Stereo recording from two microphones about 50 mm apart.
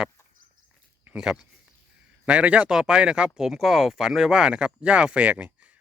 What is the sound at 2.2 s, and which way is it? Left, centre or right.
Speech, right.